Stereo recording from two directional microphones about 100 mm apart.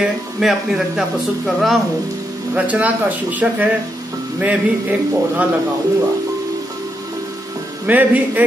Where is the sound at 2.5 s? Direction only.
15° right (ahead or behind).